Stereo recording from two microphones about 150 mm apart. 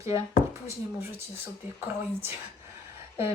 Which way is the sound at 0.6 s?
15° right (ahead or behind).